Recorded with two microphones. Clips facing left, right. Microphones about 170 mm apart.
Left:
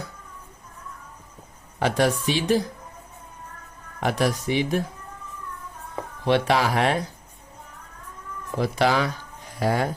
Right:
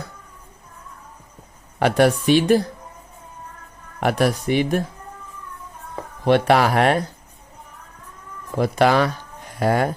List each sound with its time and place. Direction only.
1.8 s a woman's voice: 60° right (ahead or behind)
4.0 s a woman's voice: 55° right (ahead or behind)
6.2 s a woman's voice: 55° right (ahead or behind)
8.5 s a woman's voice: 50° right (ahead or behind)